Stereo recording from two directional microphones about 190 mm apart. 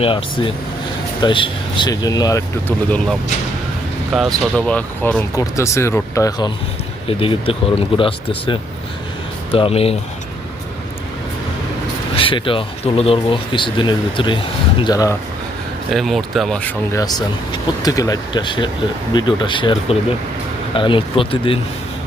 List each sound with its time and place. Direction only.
0.0 s speech: 25° left (ahead or behind)
7.1 s speech: 30° left (ahead or behind)
12.1 s speech: 25° left (ahead or behind)
15.9 s speech: centre (ahead or behind)
17.0 s speech: 20° left (ahead or behind)